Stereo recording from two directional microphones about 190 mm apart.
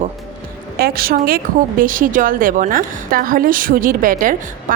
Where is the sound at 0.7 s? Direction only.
50° right (ahead or behind).